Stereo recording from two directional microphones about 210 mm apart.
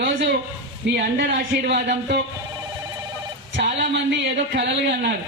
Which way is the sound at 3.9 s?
55° right (ahead or behind).